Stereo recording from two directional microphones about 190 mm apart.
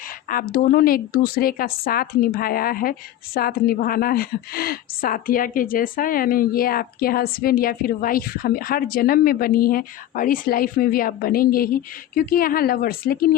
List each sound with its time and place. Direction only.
0.3 s a woman's voice: 50° left (ahead or behind)